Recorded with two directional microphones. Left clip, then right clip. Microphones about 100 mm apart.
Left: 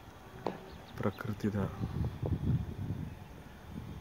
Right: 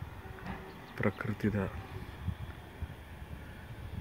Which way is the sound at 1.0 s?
5° right (ahead or behind).